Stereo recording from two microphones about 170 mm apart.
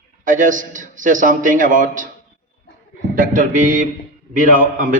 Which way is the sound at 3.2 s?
50° right (ahead or behind).